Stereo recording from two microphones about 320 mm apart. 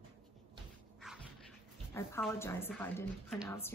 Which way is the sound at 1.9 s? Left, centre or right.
Centre.